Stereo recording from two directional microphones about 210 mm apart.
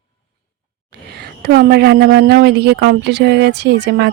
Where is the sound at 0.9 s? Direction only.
50° right (ahead or behind).